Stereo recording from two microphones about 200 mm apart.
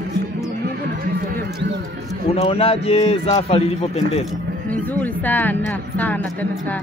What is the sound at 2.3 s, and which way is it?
A man's voice, 30° left (ahead or behind).